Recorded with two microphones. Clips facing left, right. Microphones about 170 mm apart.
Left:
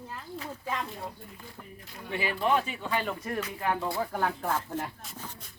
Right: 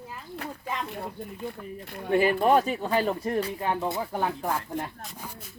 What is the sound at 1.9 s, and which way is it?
Speech, 50° right (ahead or behind).